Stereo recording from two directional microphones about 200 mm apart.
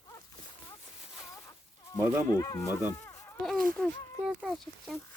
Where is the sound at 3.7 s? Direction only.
Centre (ahead or behind).